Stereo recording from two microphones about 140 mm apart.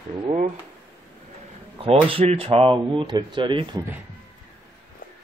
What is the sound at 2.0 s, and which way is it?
Speech, 40° right (ahead or behind).